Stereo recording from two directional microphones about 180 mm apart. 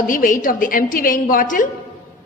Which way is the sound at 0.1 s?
50° left (ahead or behind).